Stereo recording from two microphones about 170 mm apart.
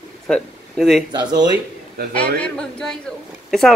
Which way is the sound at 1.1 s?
25° right (ahead or behind).